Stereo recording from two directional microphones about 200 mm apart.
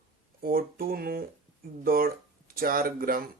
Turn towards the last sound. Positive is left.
turn(degrees=-45)  # may be behind; listen again after turning